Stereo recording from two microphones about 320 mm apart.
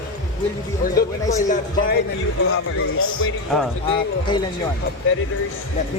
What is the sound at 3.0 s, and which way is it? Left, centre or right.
Speech, left.